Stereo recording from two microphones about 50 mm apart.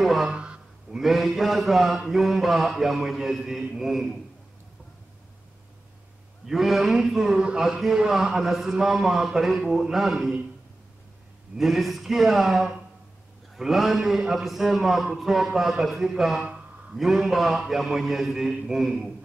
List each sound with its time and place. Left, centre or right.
0.0 s speech: centre
0.3 s speech: right
0.9 s mantra: centre
6.4 s a man's voice: centre
8.7 s mantra: centre
11.5 s mantra: centre